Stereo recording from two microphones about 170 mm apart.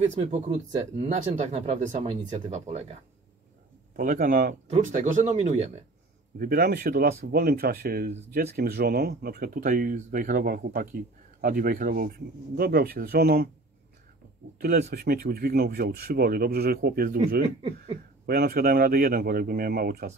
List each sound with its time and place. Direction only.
0.0 s speech: 40° right (ahead or behind)
3.9 s speech: 55° right (ahead or behind)
4.6 s speech: 45° right (ahead or behind)
6.3 s speech: 60° right (ahead or behind)
14.6 s speech: 70° right (ahead or behind)